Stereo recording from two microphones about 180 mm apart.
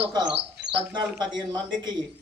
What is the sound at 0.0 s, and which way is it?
A man's voice, 25° right (ahead or behind).